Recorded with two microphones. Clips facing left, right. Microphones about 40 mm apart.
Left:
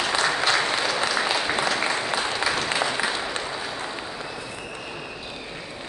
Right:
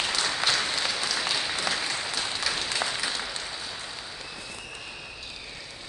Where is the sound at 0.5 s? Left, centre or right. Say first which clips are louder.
Left 5 dB; left.